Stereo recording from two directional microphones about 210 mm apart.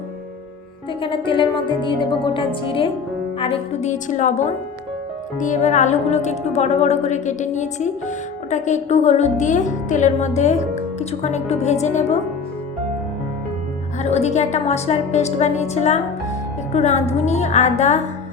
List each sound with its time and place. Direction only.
1.0 s speech: 25° left (ahead or behind)
14.0 s speech: 30° left (ahead or behind)